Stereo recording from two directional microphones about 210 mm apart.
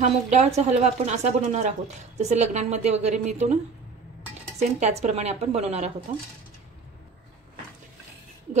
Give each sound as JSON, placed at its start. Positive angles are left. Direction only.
{"t": 0.0, "sound": "a woman's voice", "side_deg": -35}
{"t": 4.6, "sound": "a woman's voice", "side_deg": -35}